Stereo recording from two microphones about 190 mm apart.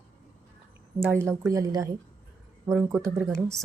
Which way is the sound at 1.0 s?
10° right (ahead or behind).